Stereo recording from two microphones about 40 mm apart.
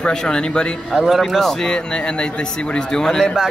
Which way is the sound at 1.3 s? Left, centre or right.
Centre.